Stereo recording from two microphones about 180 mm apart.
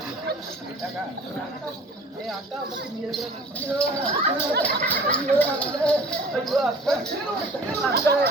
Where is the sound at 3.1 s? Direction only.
5° left (ahead or behind).